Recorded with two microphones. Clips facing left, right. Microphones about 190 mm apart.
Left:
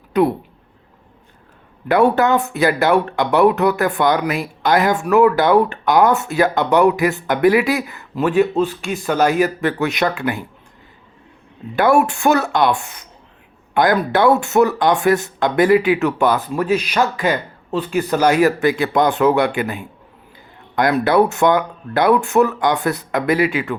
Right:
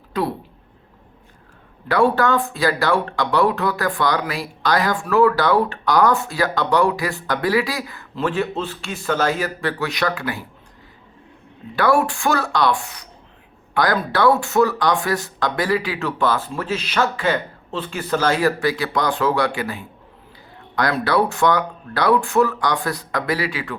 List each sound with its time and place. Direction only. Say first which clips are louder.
0.1 s speech: left 7 dB; 20° left (ahead or behind)
1.9 s speech: left 3 dB; 20° left (ahead or behind)
11.8 s speech: left 3 dB; 20° left (ahead or behind)